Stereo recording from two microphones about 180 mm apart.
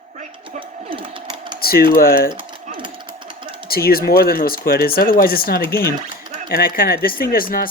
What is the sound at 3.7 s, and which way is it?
Speech, 55° left (ahead or behind).